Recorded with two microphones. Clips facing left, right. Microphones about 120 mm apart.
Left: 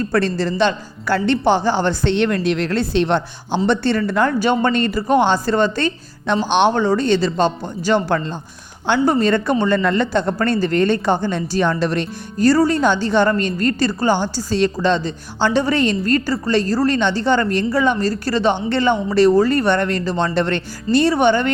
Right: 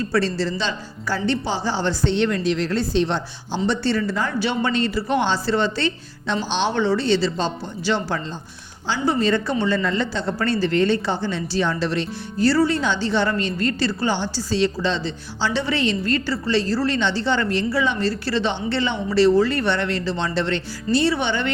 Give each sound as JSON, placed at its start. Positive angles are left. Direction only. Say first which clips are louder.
{"t": 0.0, "sound": "a woman's voice", "louder": "left 3 dB", "side_deg": 55}